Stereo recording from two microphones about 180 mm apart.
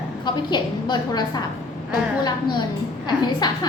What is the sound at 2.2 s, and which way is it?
A woman's voice, 25° left (ahead or behind).